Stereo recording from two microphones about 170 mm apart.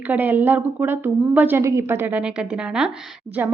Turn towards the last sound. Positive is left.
turn(degrees=-10)  # may be behind; listen again after turning